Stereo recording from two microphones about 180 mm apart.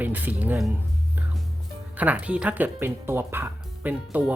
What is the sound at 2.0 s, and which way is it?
Speech, 10° right (ahead or behind).